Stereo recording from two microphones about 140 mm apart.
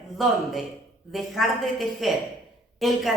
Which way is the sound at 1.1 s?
Centre (ahead or behind).